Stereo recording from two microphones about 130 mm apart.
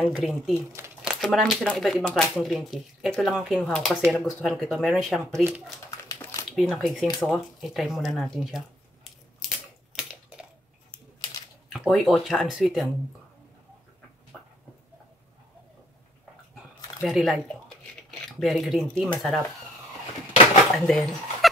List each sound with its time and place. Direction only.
0.0 s speech: 5° right (ahead or behind)
3.6 s speech: 5° left (ahead or behind)
5.2 s speech: 20° right (ahead or behind)
5.9 s a sound: 25° left (ahead or behind)
6.5 s speech: centre (ahead or behind)
11.7 s speech: centre (ahead or behind)
16.5 s a sound: centre (ahead or behind)
18.4 s speech: centre (ahead or behind)
20.8 s speech: centre (ahead or behind)